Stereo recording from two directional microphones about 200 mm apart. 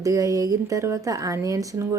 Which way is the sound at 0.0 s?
15° right (ahead or behind).